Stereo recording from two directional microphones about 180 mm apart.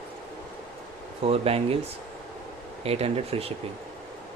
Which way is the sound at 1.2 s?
35° right (ahead or behind).